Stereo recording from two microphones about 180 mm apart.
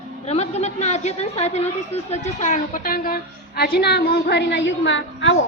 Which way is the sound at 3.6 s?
60° left (ahead or behind).